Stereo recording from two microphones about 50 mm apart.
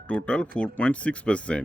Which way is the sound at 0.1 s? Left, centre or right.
Left.